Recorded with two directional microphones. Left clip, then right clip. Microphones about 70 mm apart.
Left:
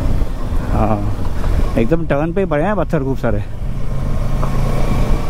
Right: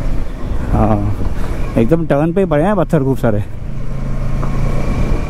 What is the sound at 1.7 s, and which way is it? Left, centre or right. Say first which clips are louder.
Speech: right 3 dB; right.